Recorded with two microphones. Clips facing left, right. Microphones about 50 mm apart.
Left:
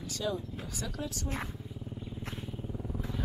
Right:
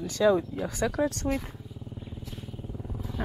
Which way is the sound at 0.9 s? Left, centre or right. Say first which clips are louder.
Right 10 dB; right.